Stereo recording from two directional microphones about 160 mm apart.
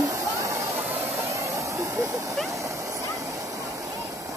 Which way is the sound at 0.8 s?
10° right (ahead or behind).